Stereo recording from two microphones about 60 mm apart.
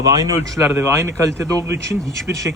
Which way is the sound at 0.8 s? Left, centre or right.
Right.